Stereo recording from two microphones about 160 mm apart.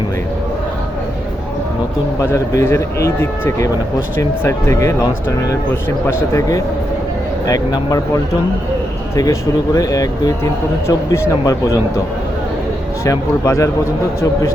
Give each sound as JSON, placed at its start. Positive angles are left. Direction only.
{"t": 2.3, "sound": "speech", "side_deg": 15}
{"t": 9.1, "sound": "speech", "side_deg": 20}
{"t": 13.1, "sound": "speech", "side_deg": 20}